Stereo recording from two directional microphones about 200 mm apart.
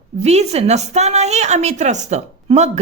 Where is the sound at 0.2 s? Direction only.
35° right (ahead or behind).